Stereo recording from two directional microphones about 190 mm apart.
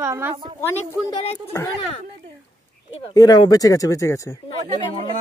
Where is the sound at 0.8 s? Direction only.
35° left (ahead or behind).